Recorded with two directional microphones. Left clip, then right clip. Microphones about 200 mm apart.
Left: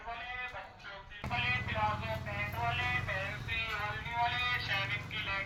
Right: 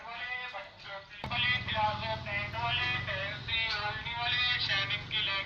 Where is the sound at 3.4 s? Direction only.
55° left (ahead or behind).